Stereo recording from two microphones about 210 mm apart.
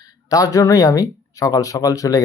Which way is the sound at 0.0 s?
15° left (ahead or behind).